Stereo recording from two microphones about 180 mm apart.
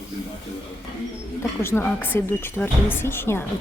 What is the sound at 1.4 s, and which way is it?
Speech, 15° left (ahead or behind).